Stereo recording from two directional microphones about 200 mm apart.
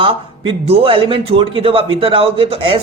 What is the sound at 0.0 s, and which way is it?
A man's voice, 25° right (ahead or behind).